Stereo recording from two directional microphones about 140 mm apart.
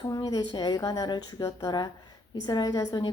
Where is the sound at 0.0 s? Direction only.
25° left (ahead or behind).